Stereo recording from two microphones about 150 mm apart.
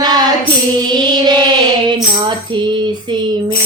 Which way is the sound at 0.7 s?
30° right (ahead or behind).